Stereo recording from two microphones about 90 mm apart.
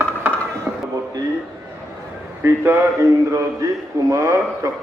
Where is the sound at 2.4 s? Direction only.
30° right (ahead or behind).